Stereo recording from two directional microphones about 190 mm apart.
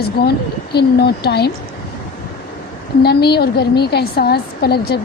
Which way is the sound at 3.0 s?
60° left (ahead or behind).